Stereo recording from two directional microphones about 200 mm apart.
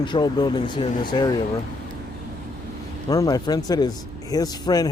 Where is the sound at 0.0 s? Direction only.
20° left (ahead or behind).